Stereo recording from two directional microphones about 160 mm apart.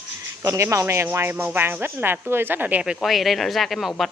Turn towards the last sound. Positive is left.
turn(degrees=0)  # may be behind; listen again after turning